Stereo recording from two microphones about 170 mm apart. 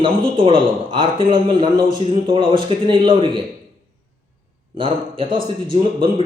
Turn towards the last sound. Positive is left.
turn(degrees=-30)  # may be behind; listen again after turning